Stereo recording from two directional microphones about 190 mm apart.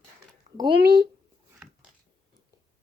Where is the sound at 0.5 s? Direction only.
25° right (ahead or behind).